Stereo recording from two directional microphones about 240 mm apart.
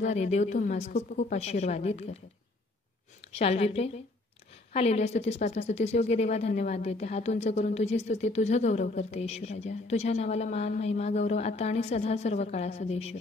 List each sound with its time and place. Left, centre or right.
0.0 s a woman's voice: left
3.3 s a woman's voice: left